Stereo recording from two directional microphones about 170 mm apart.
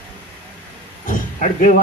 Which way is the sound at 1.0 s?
50° left (ahead or behind).